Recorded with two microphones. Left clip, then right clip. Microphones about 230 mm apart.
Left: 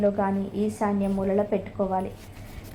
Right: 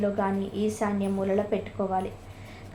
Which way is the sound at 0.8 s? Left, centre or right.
Centre.